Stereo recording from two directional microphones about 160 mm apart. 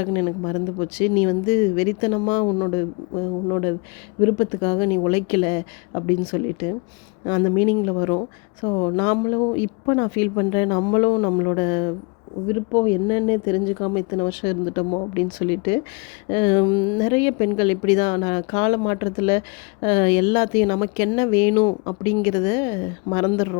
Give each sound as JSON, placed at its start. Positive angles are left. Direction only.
{"t": 0.0, "sound": "speech", "side_deg": 30}